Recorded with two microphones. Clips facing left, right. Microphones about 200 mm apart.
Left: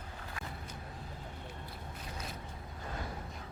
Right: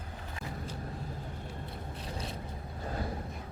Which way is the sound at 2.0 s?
30° right (ahead or behind).